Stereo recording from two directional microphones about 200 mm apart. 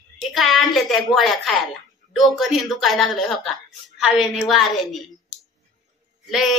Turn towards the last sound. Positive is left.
turn(degrees=0)  # may be behind; listen again after turning